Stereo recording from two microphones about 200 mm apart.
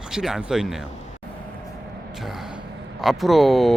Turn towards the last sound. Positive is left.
turn(degrees=0)  # may be behind; listen again after turning